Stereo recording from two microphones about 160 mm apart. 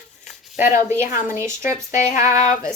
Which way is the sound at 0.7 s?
50° left (ahead or behind).